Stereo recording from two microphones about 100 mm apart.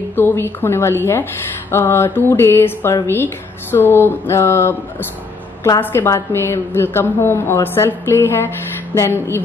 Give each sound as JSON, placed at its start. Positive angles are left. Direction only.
{"t": 0.1, "sound": "a woman's voice", "side_deg": 20}
{"t": 5.8, "sound": "a woman's voice", "side_deg": 25}